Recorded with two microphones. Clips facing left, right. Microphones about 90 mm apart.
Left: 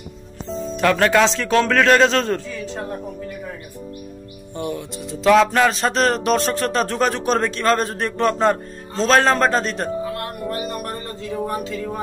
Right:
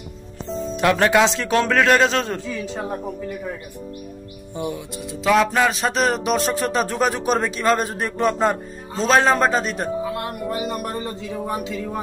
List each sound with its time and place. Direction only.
0.7 s music: 15° right (ahead or behind)
4.6 s music: 5° right (ahead or behind)
10.0 s music: 20° right (ahead or behind)